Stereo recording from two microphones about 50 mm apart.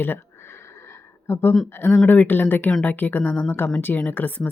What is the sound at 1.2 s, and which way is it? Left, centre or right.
Speech, left.